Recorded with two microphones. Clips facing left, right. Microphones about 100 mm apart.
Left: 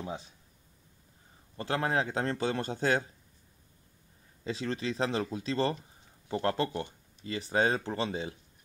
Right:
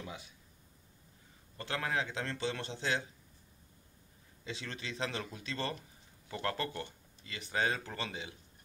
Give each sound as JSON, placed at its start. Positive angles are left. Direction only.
{"t": 0.0, "sound": "speech", "side_deg": 35}
{"t": 1.6, "sound": "speech", "side_deg": 30}
{"t": 4.5, "sound": "speech", "side_deg": 35}